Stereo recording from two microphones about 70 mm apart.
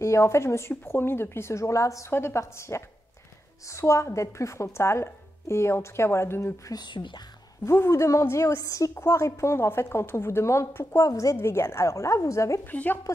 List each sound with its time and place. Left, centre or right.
0.0 s speech: left
2.0 s speech: left
6.7 s speech: left
7.6 s a woman's voice: left
11.0 s a woman's voice: left
11.3 s a woman's voice: left
12.7 s speech: left